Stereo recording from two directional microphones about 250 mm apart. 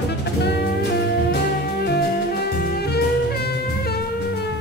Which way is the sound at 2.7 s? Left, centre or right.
Left.